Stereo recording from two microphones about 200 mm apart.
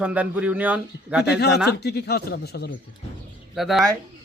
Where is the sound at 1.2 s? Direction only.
55° left (ahead or behind).